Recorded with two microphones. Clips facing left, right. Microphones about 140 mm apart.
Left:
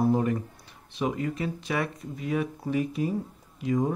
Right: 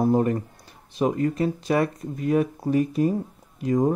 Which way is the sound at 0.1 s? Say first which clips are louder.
Right 4 dB; 40° right (ahead or behind).